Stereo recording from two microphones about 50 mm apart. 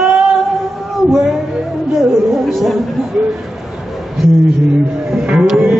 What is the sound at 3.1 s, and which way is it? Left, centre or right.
Speech, right.